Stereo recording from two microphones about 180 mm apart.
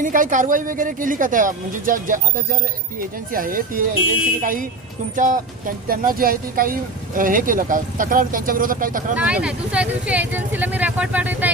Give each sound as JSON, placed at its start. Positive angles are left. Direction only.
{"t": 0.0, "sound": "speech", "side_deg": -45}
{"t": 9.1, "sound": "speech", "side_deg": -5}